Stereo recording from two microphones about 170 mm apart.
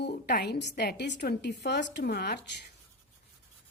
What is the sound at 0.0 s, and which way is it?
A woman's voice, 70° left (ahead or behind).